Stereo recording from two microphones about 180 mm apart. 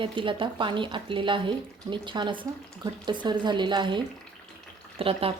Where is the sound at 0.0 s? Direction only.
30° right (ahead or behind).